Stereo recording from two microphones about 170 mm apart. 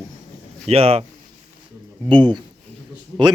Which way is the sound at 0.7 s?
35° right (ahead or behind).